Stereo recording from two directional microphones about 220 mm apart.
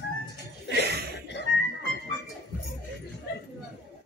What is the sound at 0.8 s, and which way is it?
Chuckle, 45° right (ahead or behind).